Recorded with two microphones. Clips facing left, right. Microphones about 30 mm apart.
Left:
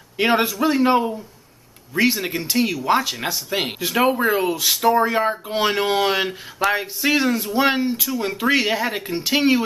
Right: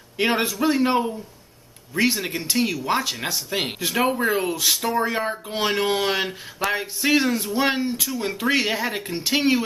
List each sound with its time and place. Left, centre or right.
0.2 s speech: centre